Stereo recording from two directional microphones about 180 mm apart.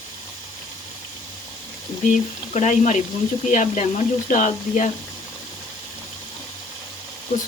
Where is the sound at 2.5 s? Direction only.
40° left (ahead or behind).